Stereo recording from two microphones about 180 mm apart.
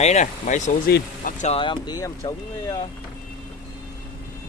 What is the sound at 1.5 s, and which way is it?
Speech, 25° left (ahead or behind).